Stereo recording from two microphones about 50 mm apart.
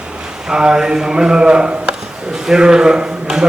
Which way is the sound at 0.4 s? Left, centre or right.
Centre.